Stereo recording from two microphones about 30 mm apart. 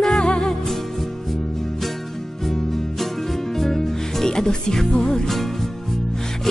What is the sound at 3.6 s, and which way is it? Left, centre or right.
Music, centre.